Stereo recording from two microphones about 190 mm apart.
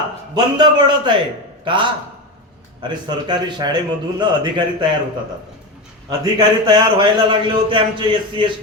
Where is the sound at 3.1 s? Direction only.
20° right (ahead or behind).